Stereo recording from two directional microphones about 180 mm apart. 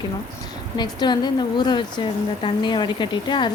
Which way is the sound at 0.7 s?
25° left (ahead or behind).